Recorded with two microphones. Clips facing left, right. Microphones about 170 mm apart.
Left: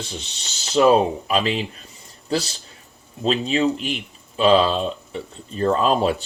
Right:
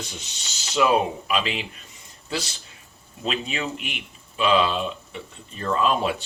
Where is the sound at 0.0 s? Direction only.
35° left (ahead or behind).